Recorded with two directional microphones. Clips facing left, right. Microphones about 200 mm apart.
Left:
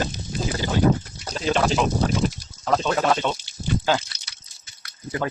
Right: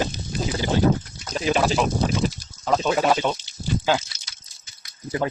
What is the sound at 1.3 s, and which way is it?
Speech, 10° right (ahead or behind).